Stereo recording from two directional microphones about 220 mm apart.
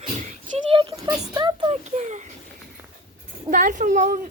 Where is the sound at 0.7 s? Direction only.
20° right (ahead or behind).